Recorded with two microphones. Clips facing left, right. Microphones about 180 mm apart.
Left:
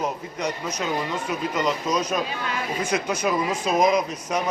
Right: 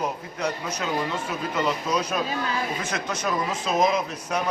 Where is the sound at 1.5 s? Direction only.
5° right (ahead or behind).